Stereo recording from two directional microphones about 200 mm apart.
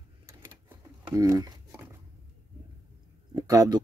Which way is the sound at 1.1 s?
20° right (ahead or behind).